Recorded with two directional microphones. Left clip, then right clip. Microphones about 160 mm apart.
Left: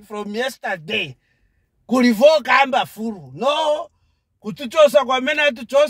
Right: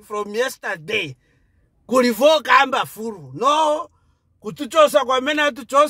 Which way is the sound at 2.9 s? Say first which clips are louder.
Even; 50° right (ahead or behind).